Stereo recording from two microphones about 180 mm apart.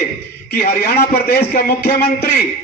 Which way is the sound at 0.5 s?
55° left (ahead or behind).